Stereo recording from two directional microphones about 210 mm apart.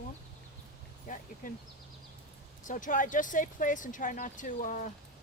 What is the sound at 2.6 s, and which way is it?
Speech, 40° left (ahead or behind).